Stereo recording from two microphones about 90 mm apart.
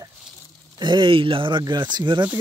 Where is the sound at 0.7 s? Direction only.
60° right (ahead or behind).